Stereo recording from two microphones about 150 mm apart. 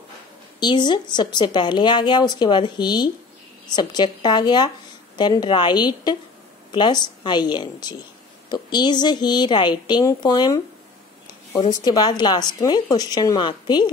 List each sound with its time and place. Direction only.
0.6 s a woman's voice: 30° left (ahead or behind)